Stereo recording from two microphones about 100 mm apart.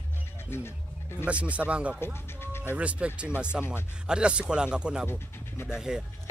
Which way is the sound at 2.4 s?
25° left (ahead or behind).